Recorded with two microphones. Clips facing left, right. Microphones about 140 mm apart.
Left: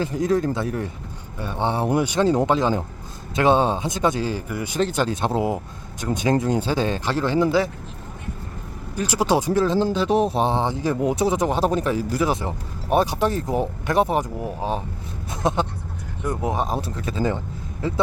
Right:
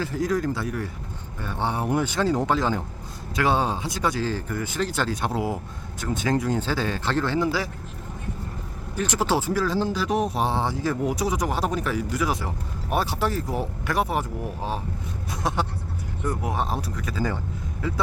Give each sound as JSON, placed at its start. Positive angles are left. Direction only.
{"t": 0.0, "sound": "speech", "side_deg": 20}
{"t": 9.0, "sound": "speech", "side_deg": 15}
{"t": 15.3, "sound": "vehicle", "side_deg": 20}
{"t": 16.2, "sound": "speech", "side_deg": 20}